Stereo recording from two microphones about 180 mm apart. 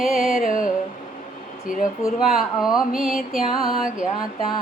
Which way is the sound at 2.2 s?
Centre (ahead or behind).